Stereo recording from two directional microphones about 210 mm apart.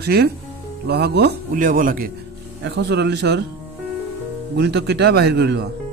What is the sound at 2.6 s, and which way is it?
Speech, 55° right (ahead or behind).